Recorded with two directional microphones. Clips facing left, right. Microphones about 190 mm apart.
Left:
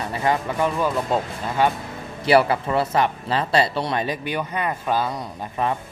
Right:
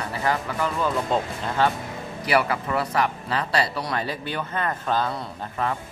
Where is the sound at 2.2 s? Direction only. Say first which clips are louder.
Left 6 dB; 30° left (ahead or behind).